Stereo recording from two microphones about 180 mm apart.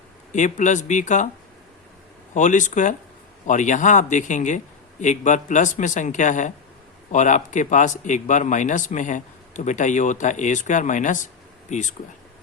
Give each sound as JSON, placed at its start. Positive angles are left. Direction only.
{"t": 0.3, "sound": "a man's voice", "side_deg": 45}
{"t": 2.3, "sound": "a man's voice", "side_deg": 45}